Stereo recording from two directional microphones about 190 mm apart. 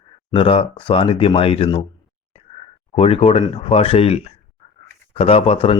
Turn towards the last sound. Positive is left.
turn(degrees=30)  # may be behind; listen again after turning